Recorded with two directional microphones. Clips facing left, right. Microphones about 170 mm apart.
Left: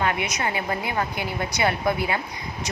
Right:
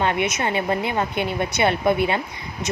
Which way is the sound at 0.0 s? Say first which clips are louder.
Right 3 dB; 25° right (ahead or behind).